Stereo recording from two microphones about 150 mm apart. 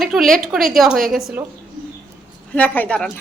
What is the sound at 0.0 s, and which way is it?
A woman's voice, centre (ahead or behind).